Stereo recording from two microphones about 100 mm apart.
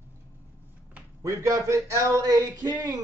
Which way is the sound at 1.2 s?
35° right (ahead or behind).